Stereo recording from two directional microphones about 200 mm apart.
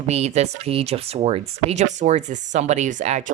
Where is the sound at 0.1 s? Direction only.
35° right (ahead or behind).